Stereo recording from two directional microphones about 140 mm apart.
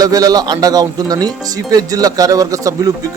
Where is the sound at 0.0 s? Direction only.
25° right (ahead or behind).